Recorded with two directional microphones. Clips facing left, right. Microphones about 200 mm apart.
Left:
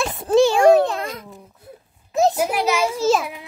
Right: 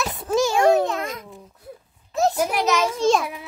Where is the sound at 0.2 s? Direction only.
30° left (ahead or behind).